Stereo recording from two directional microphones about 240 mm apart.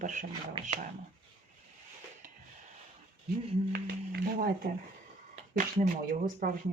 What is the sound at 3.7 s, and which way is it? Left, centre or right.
Speech, right.